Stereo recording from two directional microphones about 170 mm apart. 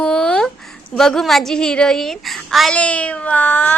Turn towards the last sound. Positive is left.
turn(degrees=10)  # may be behind; listen again after turning